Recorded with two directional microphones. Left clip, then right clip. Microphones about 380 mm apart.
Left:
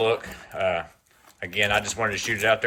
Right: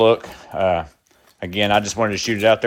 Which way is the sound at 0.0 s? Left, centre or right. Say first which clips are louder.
Right 8 dB; centre.